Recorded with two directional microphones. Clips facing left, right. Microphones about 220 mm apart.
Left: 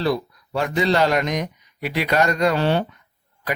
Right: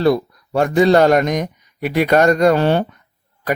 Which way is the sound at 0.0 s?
50° right (ahead or behind).